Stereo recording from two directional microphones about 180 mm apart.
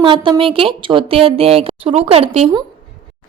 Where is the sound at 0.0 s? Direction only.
30° right (ahead or behind).